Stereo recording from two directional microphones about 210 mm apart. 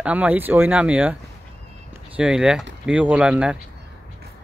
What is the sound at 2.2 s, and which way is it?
Speech, 5° right (ahead or behind).